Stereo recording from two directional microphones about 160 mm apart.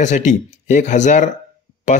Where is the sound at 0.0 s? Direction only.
50° left (ahead or behind).